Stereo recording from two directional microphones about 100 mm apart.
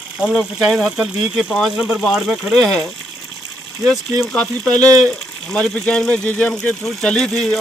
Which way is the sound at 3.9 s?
10° left (ahead or behind).